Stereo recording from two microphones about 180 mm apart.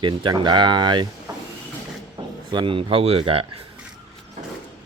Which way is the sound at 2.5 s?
25° right (ahead or behind).